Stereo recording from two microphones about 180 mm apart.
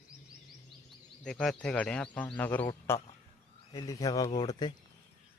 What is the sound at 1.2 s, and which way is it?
Speech, centre (ahead or behind).